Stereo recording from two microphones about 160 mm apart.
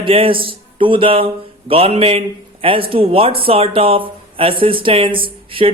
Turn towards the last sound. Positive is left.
turn(degrees=-35)  # may be behind; listen again after turning